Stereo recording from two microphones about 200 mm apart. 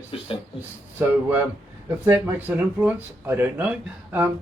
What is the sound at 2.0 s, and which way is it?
Speech, 10° right (ahead or behind).